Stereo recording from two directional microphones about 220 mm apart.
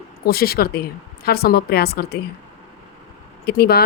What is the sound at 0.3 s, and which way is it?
A woman's voice, 45° left (ahead or behind).